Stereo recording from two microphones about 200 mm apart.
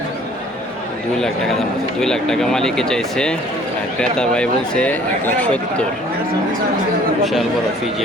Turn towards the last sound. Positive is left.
turn(degrees=0)  # may be behind; listen again after turning